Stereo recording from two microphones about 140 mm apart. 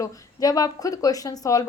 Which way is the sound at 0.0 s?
25° left (ahead or behind).